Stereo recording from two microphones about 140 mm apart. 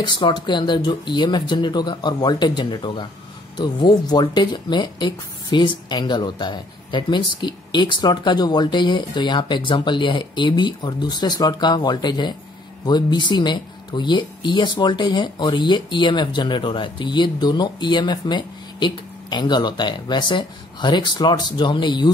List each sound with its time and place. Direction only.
0.0 s speech: 35° left (ahead or behind)